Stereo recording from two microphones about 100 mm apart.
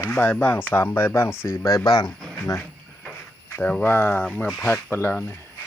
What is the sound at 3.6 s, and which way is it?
Speech, 15° left (ahead or behind).